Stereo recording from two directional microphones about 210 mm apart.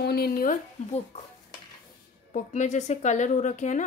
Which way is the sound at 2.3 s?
35° left (ahead or behind).